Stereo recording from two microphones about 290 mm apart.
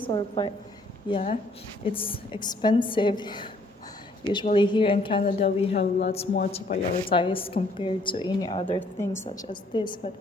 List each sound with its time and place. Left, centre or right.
0.0 s a woman's voice: centre